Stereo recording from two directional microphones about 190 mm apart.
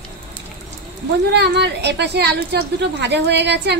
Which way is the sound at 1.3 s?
60° right (ahead or behind).